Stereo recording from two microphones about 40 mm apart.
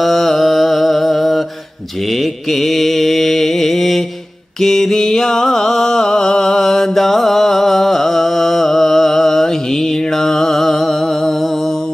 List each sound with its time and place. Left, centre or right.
0.0 s mantra: centre
2.5 s mantra: centre
4.6 s music: centre